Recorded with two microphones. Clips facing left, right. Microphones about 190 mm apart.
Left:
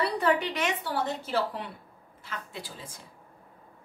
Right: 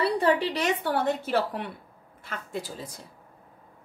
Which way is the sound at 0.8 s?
55° right (ahead or behind).